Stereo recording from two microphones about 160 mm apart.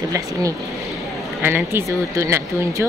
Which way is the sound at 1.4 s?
15° right (ahead or behind).